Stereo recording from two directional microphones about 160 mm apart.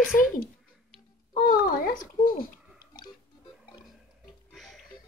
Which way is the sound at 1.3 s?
65° left (ahead or behind).